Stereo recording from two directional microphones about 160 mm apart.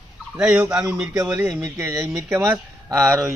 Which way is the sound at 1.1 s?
20° right (ahead or behind).